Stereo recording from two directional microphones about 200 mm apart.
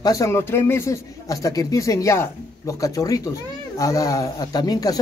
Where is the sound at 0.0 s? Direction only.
15° left (ahead or behind).